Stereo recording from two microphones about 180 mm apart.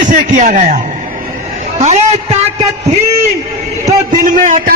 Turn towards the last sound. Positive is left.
turn(degrees=-45)  # may be behind; listen again after turning